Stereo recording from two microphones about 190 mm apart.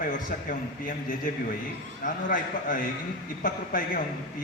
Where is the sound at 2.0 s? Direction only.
50° left (ahead or behind).